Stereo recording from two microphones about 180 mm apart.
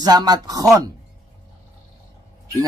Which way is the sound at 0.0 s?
20° right (ahead or behind).